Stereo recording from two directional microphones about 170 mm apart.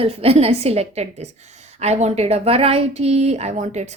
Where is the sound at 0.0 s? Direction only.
35° right (ahead or behind).